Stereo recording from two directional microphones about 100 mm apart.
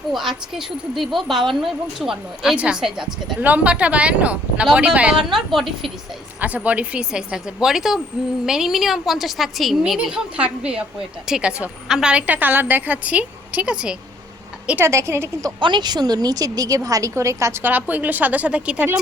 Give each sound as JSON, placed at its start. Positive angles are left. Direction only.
{"t": 0.1, "sound": "speech", "side_deg": -5}
{"t": 6.4, "sound": "speech", "side_deg": -15}
{"t": 14.8, "sound": "a woman's voice", "side_deg": -30}
{"t": 15.6, "sound": "a woman's voice", "side_deg": -50}